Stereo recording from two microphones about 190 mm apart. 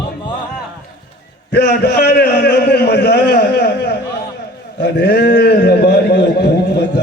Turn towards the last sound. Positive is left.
turn(degrees=60)  # may be behind; listen again after turning